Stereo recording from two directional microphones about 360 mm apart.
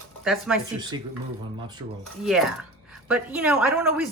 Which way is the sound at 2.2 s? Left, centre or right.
Centre.